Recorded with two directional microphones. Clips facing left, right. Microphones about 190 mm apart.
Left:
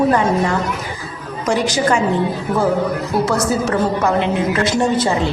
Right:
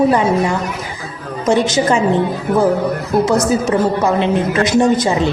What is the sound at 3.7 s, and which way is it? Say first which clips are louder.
A woman's voice: right 2 dB; 15° right (ahead or behind).